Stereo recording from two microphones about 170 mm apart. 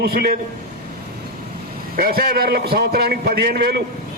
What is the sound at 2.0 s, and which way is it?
A man's voice, 60° right (ahead or behind).